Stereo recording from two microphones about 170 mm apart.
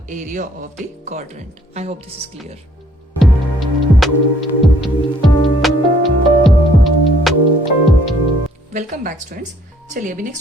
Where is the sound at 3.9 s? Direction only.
Centre (ahead or behind).